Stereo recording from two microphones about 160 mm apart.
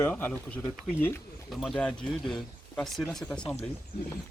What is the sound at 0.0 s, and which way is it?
Speech, 10° left (ahead or behind).